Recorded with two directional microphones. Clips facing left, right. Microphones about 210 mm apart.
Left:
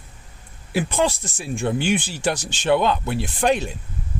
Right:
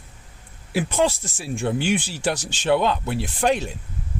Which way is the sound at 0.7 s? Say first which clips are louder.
Even; 5° right (ahead or behind).